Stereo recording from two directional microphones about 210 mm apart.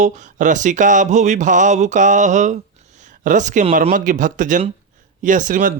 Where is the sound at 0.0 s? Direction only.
35° right (ahead or behind).